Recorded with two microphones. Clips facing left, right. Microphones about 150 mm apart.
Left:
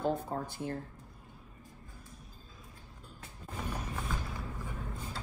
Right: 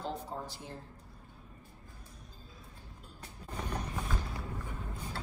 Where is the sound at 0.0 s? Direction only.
55° left (ahead or behind).